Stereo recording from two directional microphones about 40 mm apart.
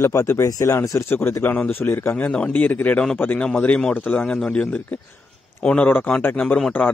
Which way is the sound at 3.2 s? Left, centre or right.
Left.